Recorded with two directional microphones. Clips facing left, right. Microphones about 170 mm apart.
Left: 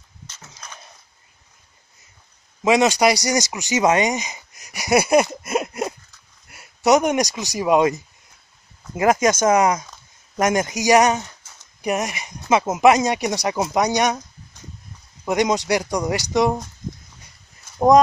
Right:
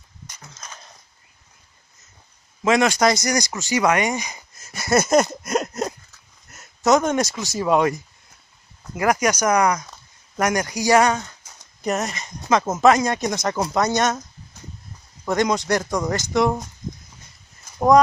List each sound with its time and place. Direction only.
2.6 s speech: 15° left (ahead or behind)
15.2 s speech: 15° left (ahead or behind)